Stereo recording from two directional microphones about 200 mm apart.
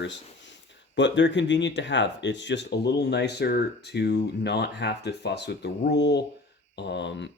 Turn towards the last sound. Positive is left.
turn(degrees=60)  # may be behind; listen again after turning